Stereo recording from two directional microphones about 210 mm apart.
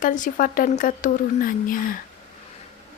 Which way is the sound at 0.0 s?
40° left (ahead or behind).